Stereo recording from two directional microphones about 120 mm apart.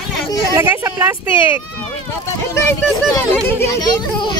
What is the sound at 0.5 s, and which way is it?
Speech, 20° right (ahead or behind).